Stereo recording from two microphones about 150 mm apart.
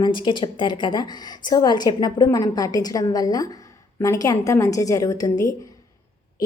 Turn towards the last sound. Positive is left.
turn(degrees=25)  # may be behind; listen again after turning